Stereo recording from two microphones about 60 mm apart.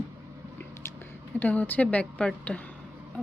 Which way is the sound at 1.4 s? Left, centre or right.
Left.